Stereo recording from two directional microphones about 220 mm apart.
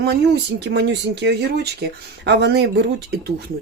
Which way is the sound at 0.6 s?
50° right (ahead or behind).